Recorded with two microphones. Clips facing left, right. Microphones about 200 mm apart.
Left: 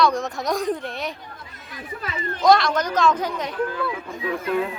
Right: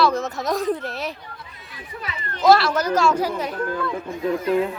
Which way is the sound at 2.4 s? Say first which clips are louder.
Right 1 dB; 5° right (ahead or behind).